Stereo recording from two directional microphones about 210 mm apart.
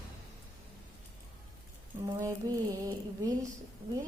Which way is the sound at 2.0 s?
15° right (ahead or behind).